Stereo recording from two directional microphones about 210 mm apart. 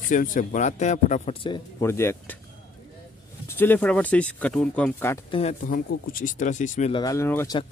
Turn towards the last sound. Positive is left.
turn(degrees=10)  # may be behind; listen again after turning